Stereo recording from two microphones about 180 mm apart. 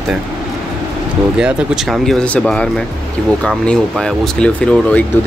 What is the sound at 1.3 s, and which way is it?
Speech, 5° right (ahead or behind).